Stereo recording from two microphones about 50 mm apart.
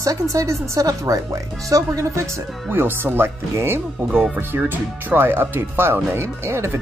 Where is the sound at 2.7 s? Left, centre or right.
Right.